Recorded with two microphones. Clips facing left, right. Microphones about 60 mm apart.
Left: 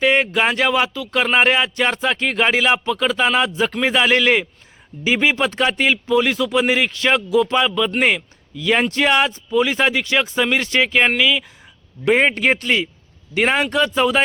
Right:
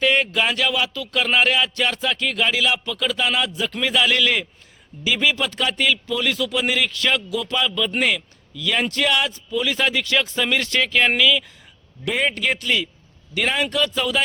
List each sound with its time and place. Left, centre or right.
0.0 s speech: left
12.0 s speech: left